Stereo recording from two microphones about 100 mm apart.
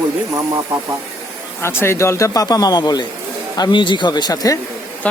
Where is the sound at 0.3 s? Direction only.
35° right (ahead or behind).